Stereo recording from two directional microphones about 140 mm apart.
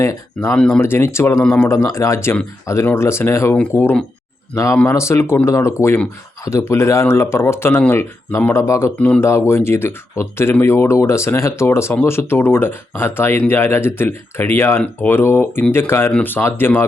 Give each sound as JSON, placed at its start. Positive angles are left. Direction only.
{"t": 0.0, "sound": "speech", "side_deg": 20}